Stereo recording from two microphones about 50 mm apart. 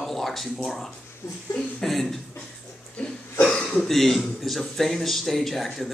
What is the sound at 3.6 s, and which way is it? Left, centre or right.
Speech, centre.